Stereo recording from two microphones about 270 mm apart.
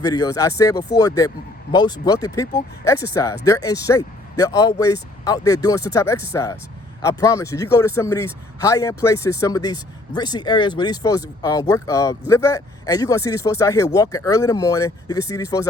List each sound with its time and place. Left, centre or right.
0.0 s speech: centre